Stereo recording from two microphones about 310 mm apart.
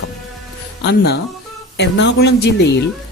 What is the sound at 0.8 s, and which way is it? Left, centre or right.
Speech, left.